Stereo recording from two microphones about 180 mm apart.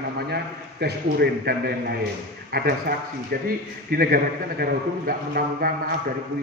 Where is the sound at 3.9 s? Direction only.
60° right (ahead or behind).